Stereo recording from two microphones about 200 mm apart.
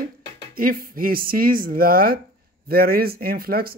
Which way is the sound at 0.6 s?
45° right (ahead or behind).